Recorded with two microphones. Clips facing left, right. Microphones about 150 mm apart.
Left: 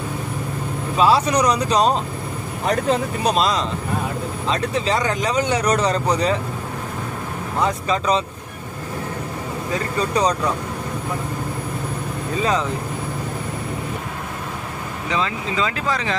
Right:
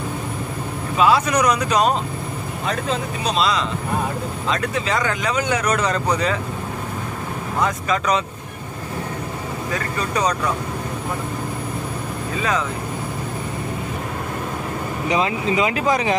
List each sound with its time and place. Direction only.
0.9 s speech: 35° left (ahead or behind)
2.6 s speech: 60° left (ahead or behind)
4.5 s speech: 30° left (ahead or behind)
7.6 s speech: 30° left (ahead or behind)
15.0 s speech: 15° right (ahead or behind)